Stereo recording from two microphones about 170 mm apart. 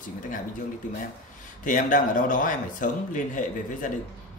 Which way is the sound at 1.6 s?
50° left (ahead or behind).